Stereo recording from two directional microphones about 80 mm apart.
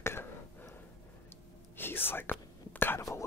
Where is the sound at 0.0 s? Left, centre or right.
Left.